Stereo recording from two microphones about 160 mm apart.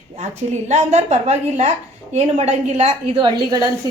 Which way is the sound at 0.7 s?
45° right (ahead or behind).